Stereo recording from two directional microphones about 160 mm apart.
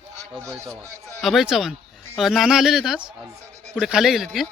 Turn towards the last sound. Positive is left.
turn(degrees=0)  # may be behind; listen again after turning